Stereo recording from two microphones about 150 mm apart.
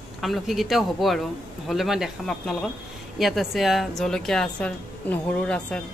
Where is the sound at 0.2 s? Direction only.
Centre (ahead or behind).